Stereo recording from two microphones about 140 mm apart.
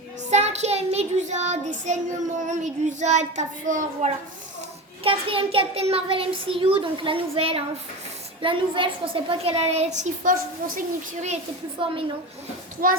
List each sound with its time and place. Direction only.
0.3 s child singing: 55° right (ahead or behind)
2.5 s a child's voice: 60° right (ahead or behind)
5.0 s a child's voice: 40° right (ahead or behind)
11.8 s a child's voice: 40° right (ahead or behind)
12.8 s a child's voice: 90° right